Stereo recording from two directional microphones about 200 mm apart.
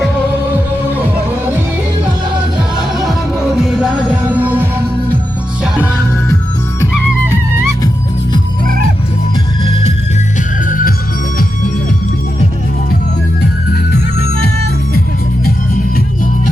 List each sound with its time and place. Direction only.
3.1 s music: centre (ahead or behind)
10.7 s music: 45° left (ahead or behind)